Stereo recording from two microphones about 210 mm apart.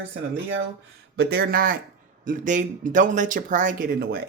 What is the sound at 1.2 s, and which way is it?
A man's voice, 45° right (ahead or behind).